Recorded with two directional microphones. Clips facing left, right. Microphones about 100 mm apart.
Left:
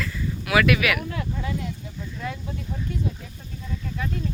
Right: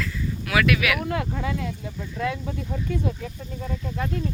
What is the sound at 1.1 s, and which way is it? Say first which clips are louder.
Speech: right 3 dB; 80° right.